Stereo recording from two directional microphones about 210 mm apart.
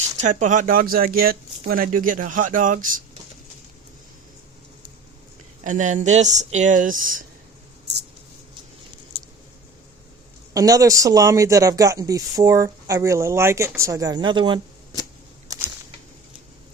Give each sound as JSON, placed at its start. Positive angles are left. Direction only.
{"t": 0.2, "sound": "speech", "side_deg": -35}
{"t": 5.6, "sound": "speech", "side_deg": -35}
{"t": 10.5, "sound": "speech", "side_deg": -15}